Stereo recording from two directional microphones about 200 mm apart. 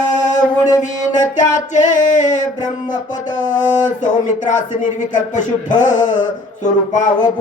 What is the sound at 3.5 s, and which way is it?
Speech, 40° left (ahead or behind).